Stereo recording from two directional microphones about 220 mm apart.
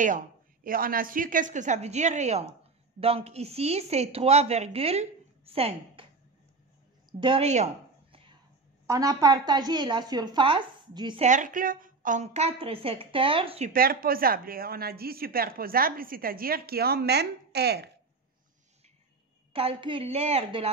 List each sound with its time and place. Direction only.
0.7 s speech: 40° right (ahead or behind)
7.1 s a sound: 20° right (ahead or behind)
8.8 s speech: 15° right (ahead or behind)
11.2 s speech: 35° right (ahead or behind)
13.7 s speech: 40° right (ahead or behind)
19.5 s speech: 25° right (ahead or behind)